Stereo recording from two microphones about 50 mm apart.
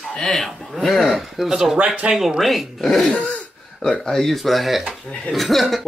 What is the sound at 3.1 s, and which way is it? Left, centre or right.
Throat clearing, left.